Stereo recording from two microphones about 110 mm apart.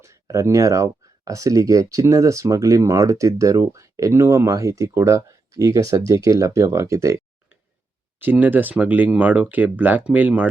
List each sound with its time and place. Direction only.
0.0 s speech: 30° right (ahead or behind)
8.2 s speech: 15° right (ahead or behind)